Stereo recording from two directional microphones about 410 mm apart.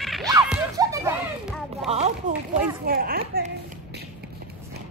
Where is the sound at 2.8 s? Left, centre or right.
Right.